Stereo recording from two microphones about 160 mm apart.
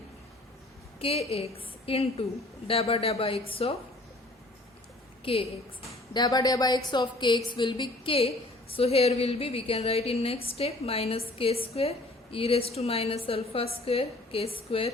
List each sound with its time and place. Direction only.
0.9 s a woman's voice: 40° left (ahead or behind)
5.2 s a woman's voice: 35° left (ahead or behind)
6.1 s a woman's voice: 25° left (ahead or behind)